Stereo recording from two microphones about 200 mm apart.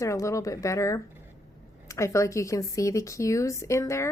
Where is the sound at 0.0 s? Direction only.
15° left (ahead or behind).